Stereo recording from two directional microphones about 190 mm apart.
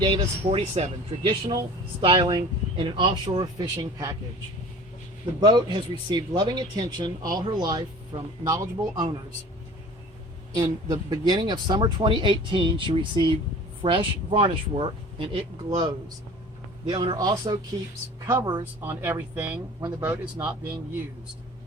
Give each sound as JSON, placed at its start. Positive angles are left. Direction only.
{"t": 0.0, "sound": "speech", "side_deg": -30}
{"t": 5.4, "sound": "speech", "side_deg": -20}
{"t": 10.5, "sound": "speech", "side_deg": -20}
{"t": 16.9, "sound": "speech", "side_deg": -20}